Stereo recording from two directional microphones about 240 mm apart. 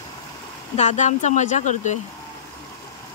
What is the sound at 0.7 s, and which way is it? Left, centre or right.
Speech, left.